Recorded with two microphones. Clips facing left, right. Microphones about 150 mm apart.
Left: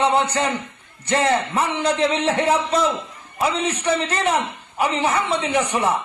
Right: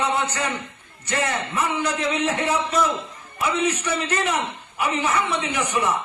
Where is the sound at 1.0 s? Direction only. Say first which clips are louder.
Left 6 dB; 30° left (ahead or behind).